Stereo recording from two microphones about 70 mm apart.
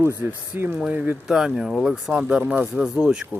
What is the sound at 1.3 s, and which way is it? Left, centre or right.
Speech, centre.